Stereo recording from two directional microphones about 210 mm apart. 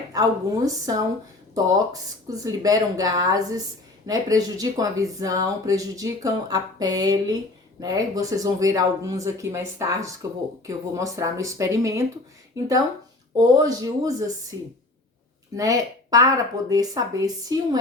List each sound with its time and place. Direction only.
0.1 s speech: 15° right (ahead or behind)
13.4 s speech: 20° right (ahead or behind)
15.5 s speech: 15° right (ahead or behind)